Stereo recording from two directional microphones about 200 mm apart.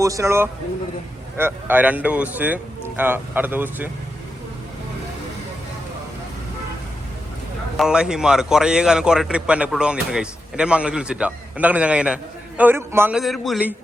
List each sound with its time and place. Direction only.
0.0 s speech: 15° right (ahead or behind)
7.8 s a man's voice: 5° right (ahead or behind)